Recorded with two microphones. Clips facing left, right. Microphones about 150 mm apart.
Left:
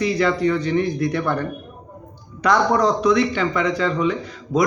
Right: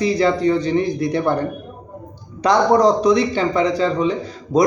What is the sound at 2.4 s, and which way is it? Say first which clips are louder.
Speech: right 4 dB; 30° right (ahead or behind).